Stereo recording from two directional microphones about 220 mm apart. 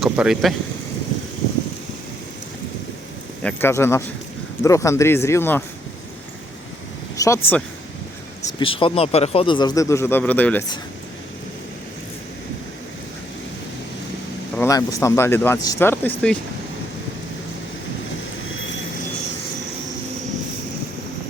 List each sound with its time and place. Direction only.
0.0 s speech: centre (ahead or behind)
3.4 s speech: 10° left (ahead or behind)
7.2 s a man's voice: 15° left (ahead or behind)
14.5 s speech: 10° left (ahead or behind)